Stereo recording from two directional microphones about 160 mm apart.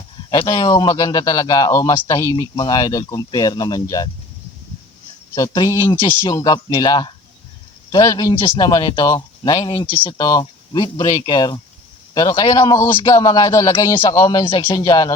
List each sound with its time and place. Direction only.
0.3 s a man's voice: 25° left (ahead or behind)
5.3 s a man's voice: 25° left (ahead or behind)